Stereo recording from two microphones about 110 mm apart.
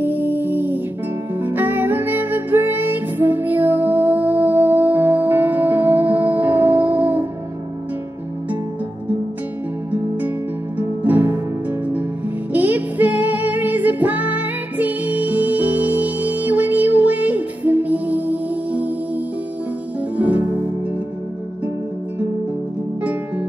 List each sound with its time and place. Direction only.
0.0 s music: 15° right (ahead or behind)
10.8 s music: 15° right (ahead or behind)
12.5 s music: 15° right (ahead or behind)
20.2 s music: 15° right (ahead or behind)